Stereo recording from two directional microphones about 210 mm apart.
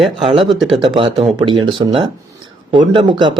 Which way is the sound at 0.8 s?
20° right (ahead or behind).